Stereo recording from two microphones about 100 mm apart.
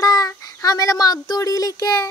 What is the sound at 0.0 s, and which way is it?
A child's voice, 35° left (ahead or behind).